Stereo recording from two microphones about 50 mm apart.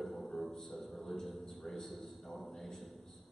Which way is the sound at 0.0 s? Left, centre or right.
Centre.